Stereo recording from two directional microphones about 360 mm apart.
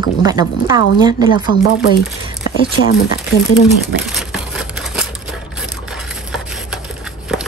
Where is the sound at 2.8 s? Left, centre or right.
Left.